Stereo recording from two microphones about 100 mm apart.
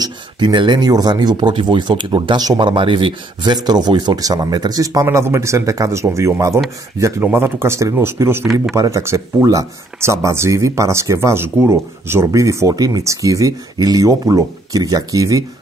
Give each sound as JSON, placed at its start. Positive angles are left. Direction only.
{"t": 0.0, "sound": "speech", "side_deg": -50}
{"t": 2.7, "sound": "speech", "side_deg": -60}
{"t": 3.6, "sound": "speech", "side_deg": -45}
{"t": 5.0, "sound": "speech", "side_deg": -25}